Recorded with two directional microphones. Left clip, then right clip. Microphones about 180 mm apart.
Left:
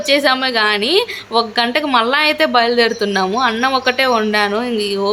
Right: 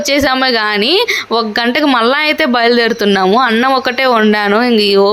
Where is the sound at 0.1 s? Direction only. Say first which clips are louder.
Right 2 dB; 30° right (ahead or behind).